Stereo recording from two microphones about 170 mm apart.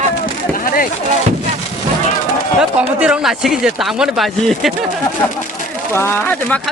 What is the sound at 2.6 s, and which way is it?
Speech, 5° right (ahead or behind).